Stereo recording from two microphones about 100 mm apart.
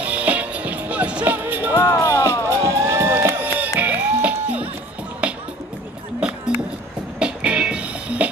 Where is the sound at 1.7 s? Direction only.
30° left (ahead or behind).